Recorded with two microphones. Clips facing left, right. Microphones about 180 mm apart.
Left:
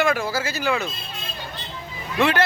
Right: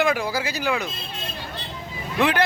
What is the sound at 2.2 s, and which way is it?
Speech, 15° right (ahead or behind).